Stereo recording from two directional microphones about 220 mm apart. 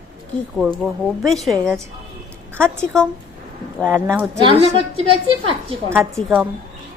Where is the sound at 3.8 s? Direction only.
5° left (ahead or behind).